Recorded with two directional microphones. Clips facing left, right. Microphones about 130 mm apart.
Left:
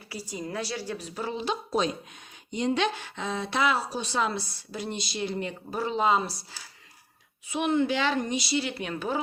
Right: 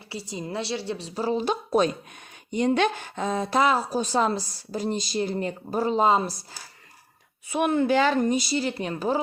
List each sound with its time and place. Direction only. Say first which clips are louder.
0.1 s a woman's voice: right 2 dB; 25° right (ahead or behind)
7.4 s speech: right 3 dB; 55° right (ahead or behind); by 9.1 s 35° right (ahead or behind)